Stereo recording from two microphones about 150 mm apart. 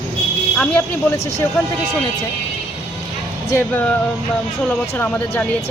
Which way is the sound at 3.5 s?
10° left (ahead or behind).